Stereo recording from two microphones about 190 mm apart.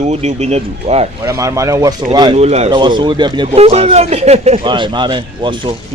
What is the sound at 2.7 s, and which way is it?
Speech, 25° right (ahead or behind).